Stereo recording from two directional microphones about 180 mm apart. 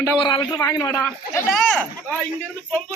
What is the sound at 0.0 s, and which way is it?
A man's voice, 25° left (ahead or behind).